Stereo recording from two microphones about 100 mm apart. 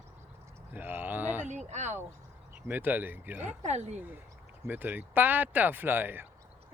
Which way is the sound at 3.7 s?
90° right.